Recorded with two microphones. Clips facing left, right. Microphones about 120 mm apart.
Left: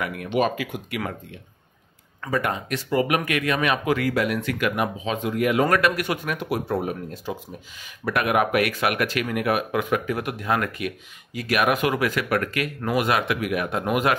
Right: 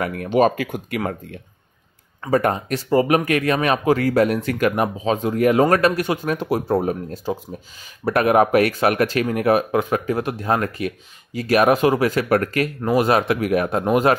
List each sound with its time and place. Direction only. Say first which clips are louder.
0.0 s speech: right 6 dB; 40° right (ahead or behind)